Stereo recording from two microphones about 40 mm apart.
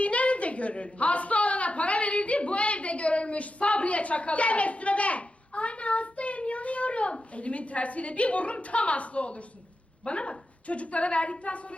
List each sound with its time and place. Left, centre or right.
0.0 s a woman's voice: left